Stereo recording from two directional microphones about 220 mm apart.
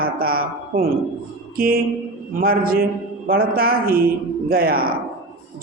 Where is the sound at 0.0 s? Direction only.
40° right (ahead or behind).